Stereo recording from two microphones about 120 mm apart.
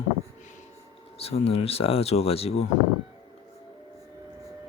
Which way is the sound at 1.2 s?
55° left (ahead or behind).